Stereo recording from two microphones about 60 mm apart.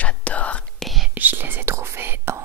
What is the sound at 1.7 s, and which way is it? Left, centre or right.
Whispering, right.